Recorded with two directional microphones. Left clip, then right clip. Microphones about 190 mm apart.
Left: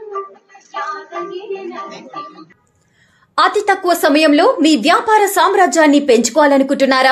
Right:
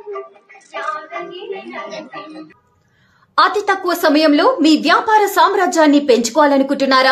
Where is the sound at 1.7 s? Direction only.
45° right (ahead or behind).